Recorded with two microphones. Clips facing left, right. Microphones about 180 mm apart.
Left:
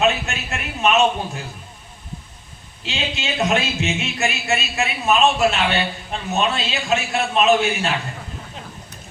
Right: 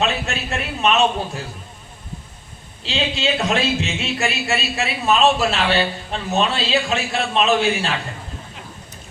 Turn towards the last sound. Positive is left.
turn(degrees=-30)  # may be behind; listen again after turning